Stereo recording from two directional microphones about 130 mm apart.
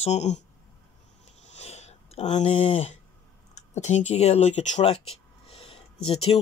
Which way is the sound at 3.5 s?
65° left (ahead or behind).